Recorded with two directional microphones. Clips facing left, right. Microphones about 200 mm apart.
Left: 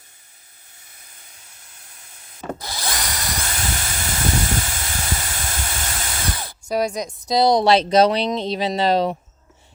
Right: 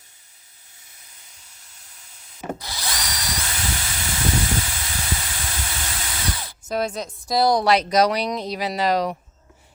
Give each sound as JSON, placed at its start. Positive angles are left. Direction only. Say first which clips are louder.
{"t": 1.8, "sound": "steam", "louder": "left 3 dB", "side_deg": 55}
{"t": 2.6, "sound": "drill", "louder": "left 3 dB", "side_deg": 50}
{"t": 6.7, "sound": "a woman's voice", "louder": "left 3 dB", "side_deg": 10}